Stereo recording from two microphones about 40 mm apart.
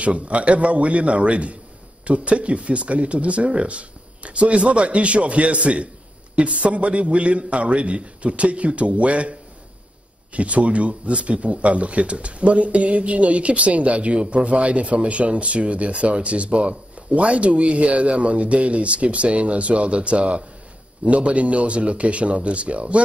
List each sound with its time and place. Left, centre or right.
0.0 s speech: right